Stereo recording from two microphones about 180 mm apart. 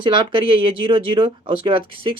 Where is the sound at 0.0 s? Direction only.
25° right (ahead or behind).